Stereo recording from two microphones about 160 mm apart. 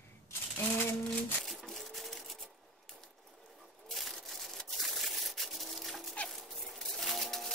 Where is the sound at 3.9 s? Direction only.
Centre (ahead or behind).